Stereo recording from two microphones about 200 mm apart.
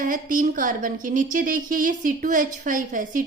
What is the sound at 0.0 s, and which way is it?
A woman's voice, 40° right (ahead or behind).